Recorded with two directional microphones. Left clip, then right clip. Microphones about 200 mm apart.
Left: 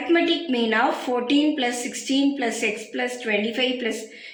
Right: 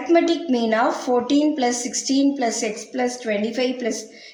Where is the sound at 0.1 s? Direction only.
55° right (ahead or behind).